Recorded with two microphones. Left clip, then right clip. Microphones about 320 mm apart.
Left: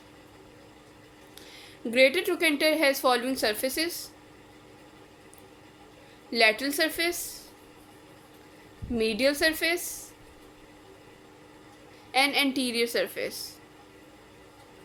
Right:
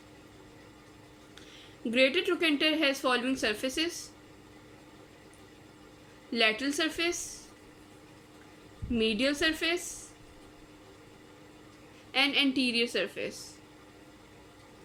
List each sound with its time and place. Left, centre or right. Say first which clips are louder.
1.4 s speech: left 2 dB; centre
6.3 s speech: left 4 dB; centre
9.0 s speech: left 4 dB; centre
12.1 s speech: left 2 dB; centre